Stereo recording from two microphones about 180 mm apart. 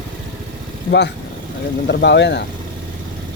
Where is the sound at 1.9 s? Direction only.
75° left (ahead or behind).